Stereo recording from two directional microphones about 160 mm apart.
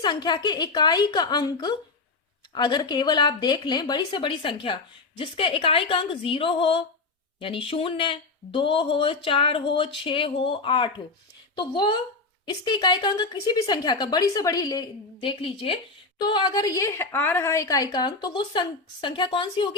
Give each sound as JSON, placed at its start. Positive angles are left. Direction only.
{"t": 0.0, "sound": "a woman's voice", "side_deg": 25}